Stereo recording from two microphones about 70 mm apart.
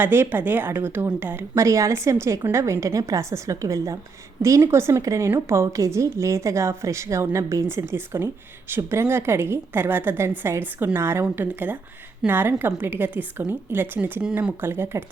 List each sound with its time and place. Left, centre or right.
0.0 s a woman's voice: right
1.5 s a woman's voice: right